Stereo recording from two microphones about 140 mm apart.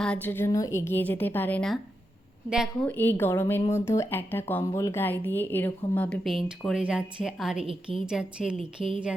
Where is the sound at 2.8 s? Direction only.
15° left (ahead or behind); by 7.6 s 5° right (ahead or behind).